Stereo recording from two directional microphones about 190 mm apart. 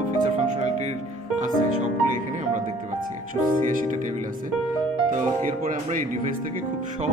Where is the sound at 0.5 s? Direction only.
35° right (ahead or behind).